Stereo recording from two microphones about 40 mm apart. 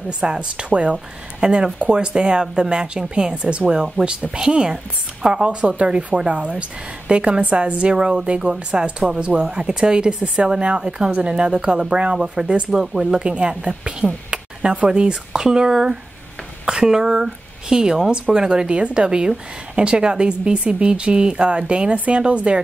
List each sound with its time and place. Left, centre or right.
0.2 s speech: right
13.3 s speech: right